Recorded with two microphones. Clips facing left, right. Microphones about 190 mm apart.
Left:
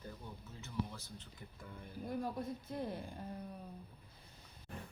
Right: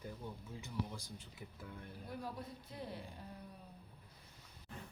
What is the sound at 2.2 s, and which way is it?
Speech, 50° left (ahead or behind).